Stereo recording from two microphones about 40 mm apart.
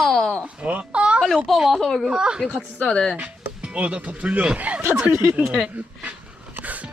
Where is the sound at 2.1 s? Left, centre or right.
Right.